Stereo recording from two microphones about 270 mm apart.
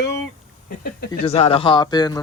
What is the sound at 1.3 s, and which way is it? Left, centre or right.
Speech, left.